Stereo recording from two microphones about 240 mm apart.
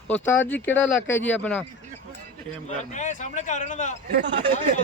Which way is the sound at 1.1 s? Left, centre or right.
Centre.